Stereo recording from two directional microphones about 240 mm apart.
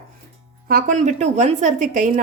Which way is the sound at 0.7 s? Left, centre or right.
Right.